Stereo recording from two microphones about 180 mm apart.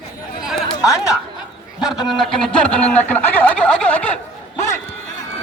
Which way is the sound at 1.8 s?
5° right (ahead or behind).